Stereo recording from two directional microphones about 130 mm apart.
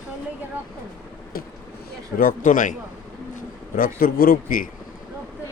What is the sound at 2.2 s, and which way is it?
Speech, 90° left.